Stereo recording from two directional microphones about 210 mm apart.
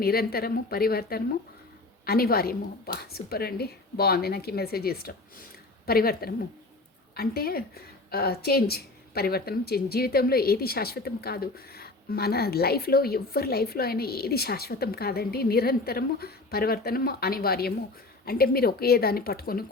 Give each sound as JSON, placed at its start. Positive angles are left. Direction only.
{"t": 0.0, "sound": "a woman's voice", "side_deg": 45}